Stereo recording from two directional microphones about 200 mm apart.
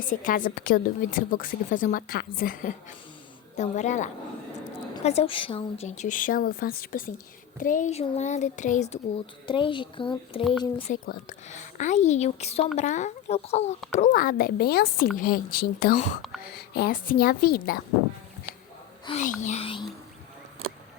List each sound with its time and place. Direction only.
0.0 s a woman's voice: 40° left (ahead or behind)
10.9 s a woman's voice: 45° left (ahead or behind)
19.0 s speech: 35° left (ahead or behind)